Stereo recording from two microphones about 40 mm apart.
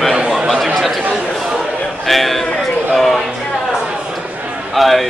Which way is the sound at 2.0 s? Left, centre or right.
Centre.